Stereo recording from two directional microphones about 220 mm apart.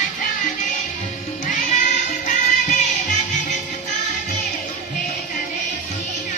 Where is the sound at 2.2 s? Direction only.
35° left (ahead or behind).